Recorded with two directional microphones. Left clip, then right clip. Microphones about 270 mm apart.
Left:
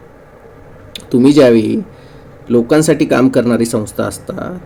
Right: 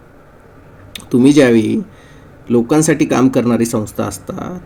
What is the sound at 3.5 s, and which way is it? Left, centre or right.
Speech, right.